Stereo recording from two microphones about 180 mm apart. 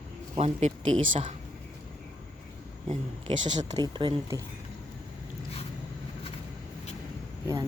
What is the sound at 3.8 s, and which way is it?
Speech, 25° right (ahead or behind).